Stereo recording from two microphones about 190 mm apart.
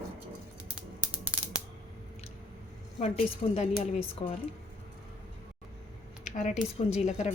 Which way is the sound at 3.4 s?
35° left (ahead or behind).